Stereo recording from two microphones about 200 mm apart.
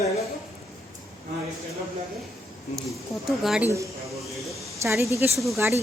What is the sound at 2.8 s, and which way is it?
A woman's voice, centre (ahead or behind).